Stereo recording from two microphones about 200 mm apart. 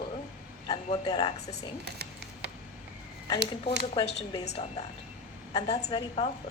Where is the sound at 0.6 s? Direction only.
25° left (ahead or behind).